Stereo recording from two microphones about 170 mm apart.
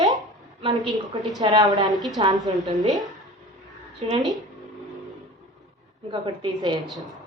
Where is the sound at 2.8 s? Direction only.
Centre (ahead or behind).